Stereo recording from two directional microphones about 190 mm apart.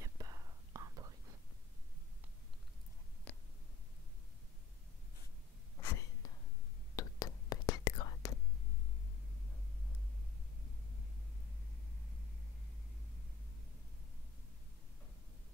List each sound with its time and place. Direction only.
0.0 s whispering: 20° right (ahead or behind)
3.3 s a sound: 5° left (ahead or behind)
5.8 s whispering: 15° left (ahead or behind)